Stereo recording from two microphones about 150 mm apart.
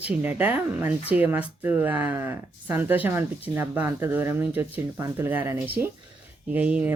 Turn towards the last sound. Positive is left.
turn(degrees=-10)  # may be behind; listen again after turning